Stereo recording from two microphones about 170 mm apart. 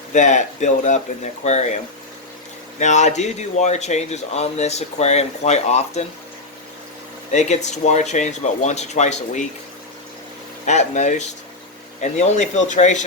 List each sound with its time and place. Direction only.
0.1 s speech: 45° left (ahead or behind)
7.3 s speech: 40° left (ahead or behind)
10.7 s speech: 45° left (ahead or behind)